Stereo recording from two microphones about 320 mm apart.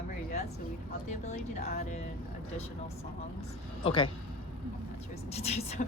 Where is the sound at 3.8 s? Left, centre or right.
Centre.